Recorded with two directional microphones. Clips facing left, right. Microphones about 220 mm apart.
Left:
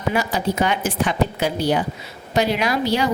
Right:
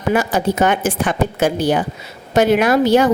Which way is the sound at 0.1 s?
50° right (ahead or behind).